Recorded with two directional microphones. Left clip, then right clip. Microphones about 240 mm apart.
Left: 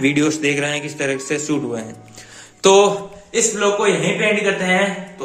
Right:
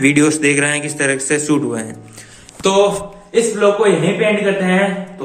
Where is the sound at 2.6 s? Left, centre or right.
Left.